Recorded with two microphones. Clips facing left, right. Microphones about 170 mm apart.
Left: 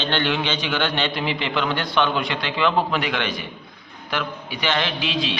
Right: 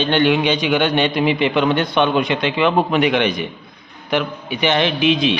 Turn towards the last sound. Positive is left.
turn(degrees=-20)  # may be behind; listen again after turning